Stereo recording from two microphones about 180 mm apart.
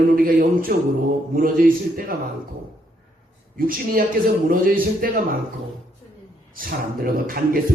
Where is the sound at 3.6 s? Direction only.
50° right (ahead or behind).